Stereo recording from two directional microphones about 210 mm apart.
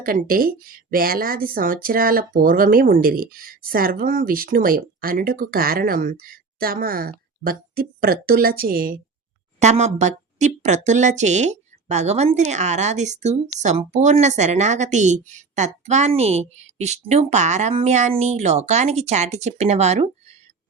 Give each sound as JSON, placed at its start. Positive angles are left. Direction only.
{"t": 0.0, "sound": "speech", "side_deg": -45}
{"t": 9.6, "sound": "speech", "side_deg": -30}